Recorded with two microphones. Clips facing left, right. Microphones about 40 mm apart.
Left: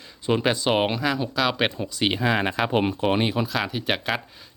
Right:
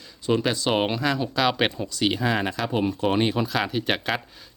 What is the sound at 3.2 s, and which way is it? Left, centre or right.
Speech, centre.